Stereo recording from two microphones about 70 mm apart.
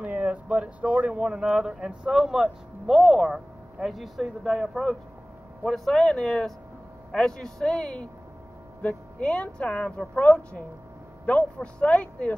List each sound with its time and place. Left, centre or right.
0.0 s speech: centre